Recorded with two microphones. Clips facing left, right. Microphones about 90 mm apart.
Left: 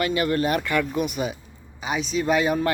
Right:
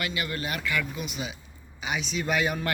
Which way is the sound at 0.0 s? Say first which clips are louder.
Left 9 dB; 40° left (ahead or behind).